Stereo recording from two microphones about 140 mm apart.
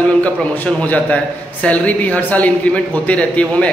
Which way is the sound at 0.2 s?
10° left (ahead or behind).